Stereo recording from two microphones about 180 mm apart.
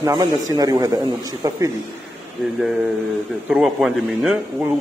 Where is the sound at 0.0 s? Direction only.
20° right (ahead or behind).